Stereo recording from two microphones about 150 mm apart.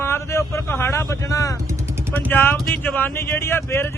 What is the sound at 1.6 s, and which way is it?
Vehicle, 20° right (ahead or behind).